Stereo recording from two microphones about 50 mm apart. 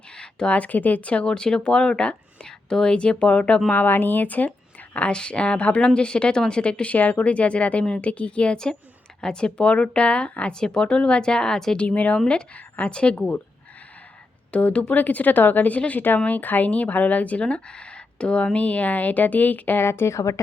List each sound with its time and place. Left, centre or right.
0.1 s a sound: centre
0.5 s a woman's voice: left
1.3 s a woman's voice: centre
3.8 s a woman's voice: left
10.5 s a woman's voice: centre
11.9 s a woman's voice: left
12.9 s a woman's voice: centre
14.5 s speech: left
19.8 s speech: left